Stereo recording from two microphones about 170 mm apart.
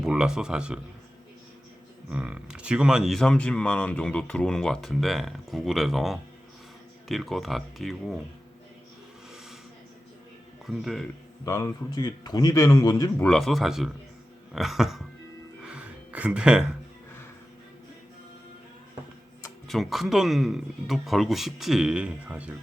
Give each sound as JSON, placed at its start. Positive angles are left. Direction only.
{"t": 0.0, "sound": "speech", "side_deg": -5}
{"t": 2.0, "sound": "speech", "side_deg": -5}
{"t": 10.7, "sound": "speech", "side_deg": 0}
{"t": 11.4, "sound": "a man's voice", "side_deg": 15}
{"t": 13.2, "sound": "speech", "side_deg": 5}
{"t": 15.6, "sound": "music", "side_deg": -5}
{"t": 19.6, "sound": "speech", "side_deg": 0}